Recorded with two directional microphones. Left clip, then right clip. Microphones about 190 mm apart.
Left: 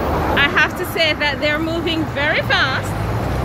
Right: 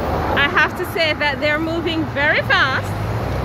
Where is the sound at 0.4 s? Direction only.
20° right (ahead or behind).